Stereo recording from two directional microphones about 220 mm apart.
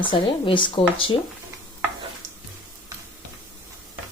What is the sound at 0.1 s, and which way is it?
Speech, 20° left (ahead or behind).